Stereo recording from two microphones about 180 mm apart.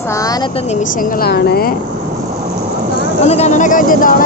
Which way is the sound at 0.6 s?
40° left (ahead or behind).